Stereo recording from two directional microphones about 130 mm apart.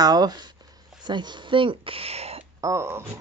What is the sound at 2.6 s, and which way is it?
Speech, 20° right (ahead or behind).